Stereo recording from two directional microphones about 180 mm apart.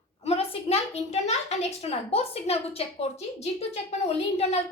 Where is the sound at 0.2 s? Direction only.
35° left (ahead or behind).